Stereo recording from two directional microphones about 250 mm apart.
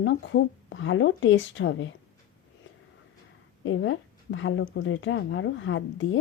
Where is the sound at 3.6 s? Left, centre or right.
Left.